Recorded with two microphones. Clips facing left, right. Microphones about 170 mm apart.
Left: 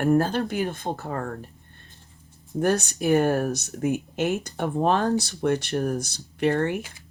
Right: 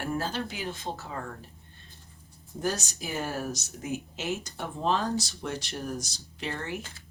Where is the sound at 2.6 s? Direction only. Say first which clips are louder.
Left 9 dB; 60° left (ahead or behind).